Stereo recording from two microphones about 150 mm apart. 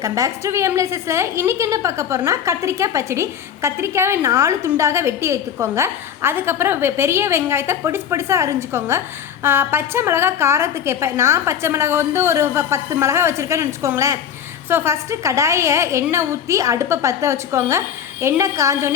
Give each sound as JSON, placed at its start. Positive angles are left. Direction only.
{"t": 0.0, "sound": "a woman's voice", "side_deg": -20}